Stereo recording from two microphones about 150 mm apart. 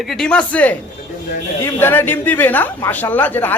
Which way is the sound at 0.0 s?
Centre (ahead or behind).